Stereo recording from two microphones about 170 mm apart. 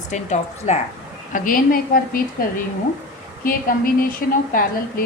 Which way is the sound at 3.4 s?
55° left (ahead or behind).